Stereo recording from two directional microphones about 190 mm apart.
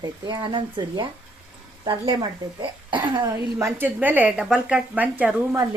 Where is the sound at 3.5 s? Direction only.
10° right (ahead or behind).